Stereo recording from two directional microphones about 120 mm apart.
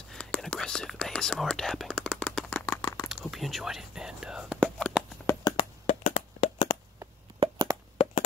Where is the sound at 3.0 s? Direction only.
Centre (ahead or behind).